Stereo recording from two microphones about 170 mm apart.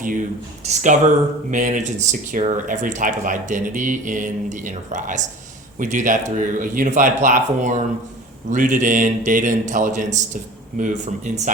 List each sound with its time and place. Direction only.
0.6 s speech: 45° right (ahead or behind)